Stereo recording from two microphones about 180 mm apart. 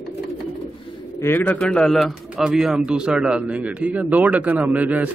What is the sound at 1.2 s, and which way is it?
A man's voice, 10° left (ahead or behind).